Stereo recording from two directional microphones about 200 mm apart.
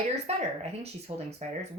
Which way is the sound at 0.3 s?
30° right (ahead or behind).